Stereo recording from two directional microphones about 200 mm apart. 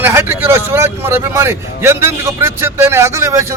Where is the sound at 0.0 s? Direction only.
10° right (ahead or behind).